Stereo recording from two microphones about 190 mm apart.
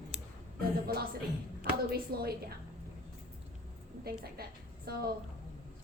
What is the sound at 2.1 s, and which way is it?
Speech, 55° right (ahead or behind).